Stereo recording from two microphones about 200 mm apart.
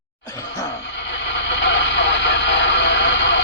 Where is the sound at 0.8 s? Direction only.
60° left (ahead or behind).